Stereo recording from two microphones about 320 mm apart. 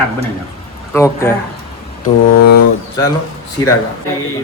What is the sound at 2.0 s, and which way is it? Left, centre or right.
Speech, left.